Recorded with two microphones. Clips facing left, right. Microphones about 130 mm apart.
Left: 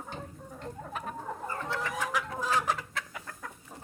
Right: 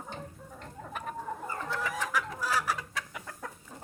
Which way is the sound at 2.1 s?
20° left (ahead or behind).